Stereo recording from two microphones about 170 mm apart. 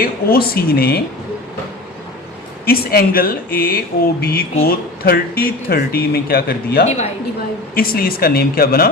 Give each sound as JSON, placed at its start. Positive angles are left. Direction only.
{"t": 0.0, "sound": "speech", "side_deg": 60}
{"t": 2.6, "sound": "speech", "side_deg": 65}
{"t": 6.8, "sound": "a woman's voice", "side_deg": 40}
{"t": 7.8, "sound": "speech", "side_deg": 60}